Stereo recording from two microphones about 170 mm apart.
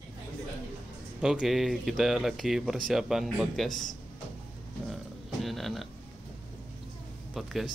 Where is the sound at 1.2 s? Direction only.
5° right (ahead or behind).